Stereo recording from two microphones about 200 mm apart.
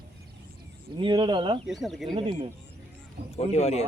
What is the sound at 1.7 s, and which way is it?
Speech, centre (ahead or behind).